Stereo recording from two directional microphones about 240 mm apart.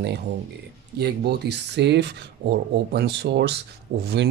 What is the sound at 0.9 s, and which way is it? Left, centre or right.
A man's voice, right.